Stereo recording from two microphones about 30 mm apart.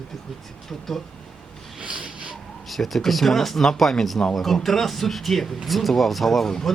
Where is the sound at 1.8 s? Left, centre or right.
Right.